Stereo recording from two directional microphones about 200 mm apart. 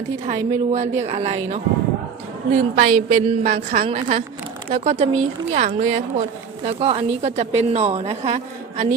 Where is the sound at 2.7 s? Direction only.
40° right (ahead or behind).